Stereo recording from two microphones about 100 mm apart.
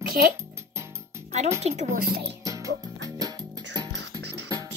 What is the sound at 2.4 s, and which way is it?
Music, 35° right (ahead or behind).